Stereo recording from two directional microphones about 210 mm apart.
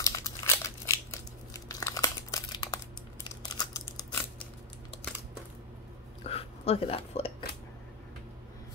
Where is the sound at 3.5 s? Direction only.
15° left (ahead or behind).